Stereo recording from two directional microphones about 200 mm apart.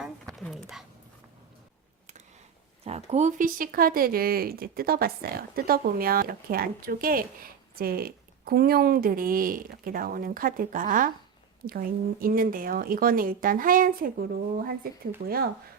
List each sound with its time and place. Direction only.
0.3 s a sound: centre (ahead or behind)
2.8 s speech: 30° right (ahead or behind)
12.2 s speech: 45° right (ahead or behind)